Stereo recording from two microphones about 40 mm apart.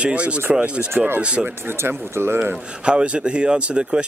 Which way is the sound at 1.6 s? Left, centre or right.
Right.